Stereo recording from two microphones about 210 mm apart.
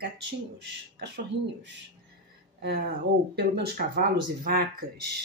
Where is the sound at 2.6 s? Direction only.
45° right (ahead or behind).